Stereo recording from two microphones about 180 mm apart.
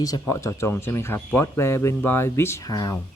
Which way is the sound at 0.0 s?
20° left (ahead or behind).